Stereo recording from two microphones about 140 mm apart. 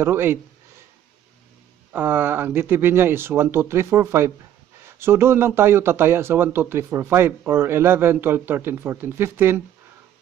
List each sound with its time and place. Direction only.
0.0 s speech: 15° right (ahead or behind)
1.9 s speech: 15° right (ahead or behind)